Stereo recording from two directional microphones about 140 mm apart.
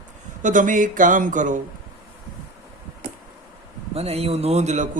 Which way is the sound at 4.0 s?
45° right (ahead or behind).